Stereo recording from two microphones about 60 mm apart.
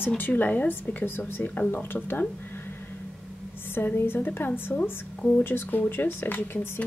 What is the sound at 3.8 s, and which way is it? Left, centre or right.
Speech, left.